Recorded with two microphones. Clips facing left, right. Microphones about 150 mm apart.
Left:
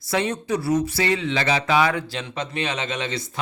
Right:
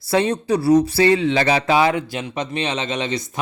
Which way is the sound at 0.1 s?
30° right (ahead or behind).